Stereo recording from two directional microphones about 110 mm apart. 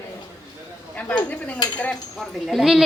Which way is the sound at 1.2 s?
15° left (ahead or behind).